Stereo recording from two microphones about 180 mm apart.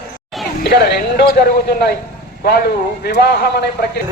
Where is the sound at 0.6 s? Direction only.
65° left (ahead or behind).